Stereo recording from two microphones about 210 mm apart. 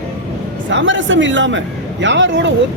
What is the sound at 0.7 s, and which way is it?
Speech, 60° right (ahead or behind).